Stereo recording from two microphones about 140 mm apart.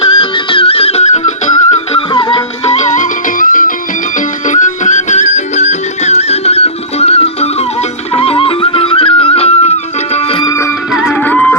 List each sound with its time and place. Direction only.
0.0 s music: 40° left (ahead or behind); by 1.5 s 55° left (ahead or behind)
1.7 s music: 40° left (ahead or behind)
2.7 s music: 60° left (ahead or behind); by 3.7 s 75° left (ahead or behind)
4.4 s music: 60° left (ahead or behind); by 9.7 s 45° left (ahead or behind)
11.3 s music: 10° left (ahead or behind)